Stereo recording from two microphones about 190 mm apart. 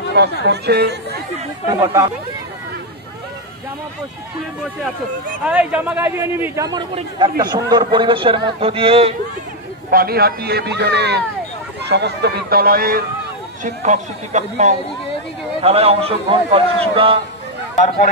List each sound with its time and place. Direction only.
0.1 s a man's voice: 60° right (ahead or behind)
1.7 s a man's voice: 20° right (ahead or behind)
5.5 s a man's voice: 5° right (ahead or behind); by 9.1 s 30° right (ahead or behind)
9.8 s a man's voice: 55° right (ahead or behind)
13.8 s a man's voice: 40° right (ahead or behind)
17.7 s speech: 40° left (ahead or behind)